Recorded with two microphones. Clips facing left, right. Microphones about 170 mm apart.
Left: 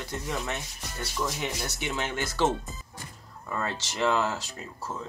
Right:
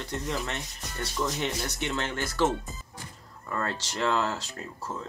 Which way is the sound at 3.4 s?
10° left (ahead or behind).